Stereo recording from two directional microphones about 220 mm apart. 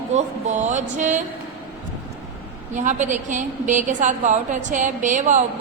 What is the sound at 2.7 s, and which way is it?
A woman's voice, 35° right (ahead or behind).